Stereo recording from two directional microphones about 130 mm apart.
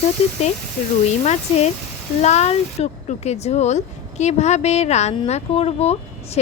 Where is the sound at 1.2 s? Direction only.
60° left (ahead or behind).